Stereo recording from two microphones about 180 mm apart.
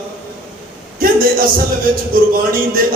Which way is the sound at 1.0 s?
50° right (ahead or behind).